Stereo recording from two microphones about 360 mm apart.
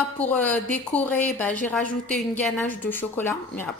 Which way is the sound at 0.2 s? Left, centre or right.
Centre.